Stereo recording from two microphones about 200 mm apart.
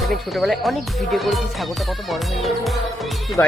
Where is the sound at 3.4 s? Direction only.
10° left (ahead or behind).